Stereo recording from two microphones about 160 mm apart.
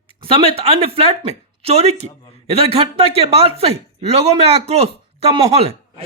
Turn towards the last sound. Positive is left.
turn(degrees=-40)  # may be behind; listen again after turning